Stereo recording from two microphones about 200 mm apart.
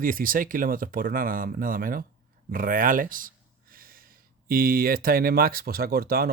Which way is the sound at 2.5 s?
45° right (ahead or behind).